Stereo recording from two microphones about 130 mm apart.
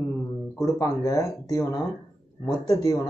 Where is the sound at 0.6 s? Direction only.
25° left (ahead or behind).